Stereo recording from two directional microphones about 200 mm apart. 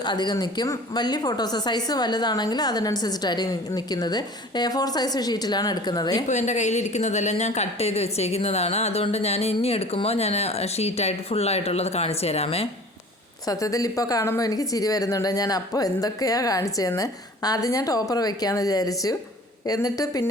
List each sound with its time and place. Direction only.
0.0 s speech: 20° left (ahead or behind)
6.2 s a woman's voice: 35° left (ahead or behind)
13.5 s speech: 15° left (ahead or behind)